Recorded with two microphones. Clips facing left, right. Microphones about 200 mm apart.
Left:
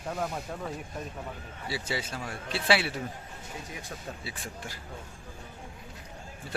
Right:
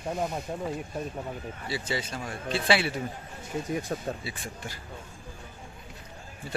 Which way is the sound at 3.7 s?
45° right (ahead or behind).